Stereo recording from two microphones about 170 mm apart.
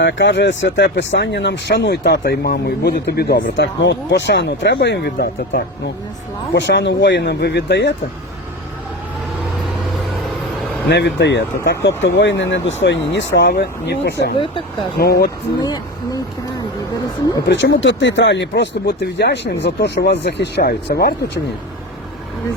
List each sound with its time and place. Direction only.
0.0 s speech: 90° left; by 5.6 s 70° left (ahead or behind)
6.5 s speech: 90° left
10.8 s speech: 85° left
14.3 s speech: 30° left (ahead or behind)
14.9 s speech: 65° left (ahead or behind)
15.6 s speech: 20° left (ahead or behind)
17.5 s speech: 90° left; by 21.2 s 65° left (ahead or behind)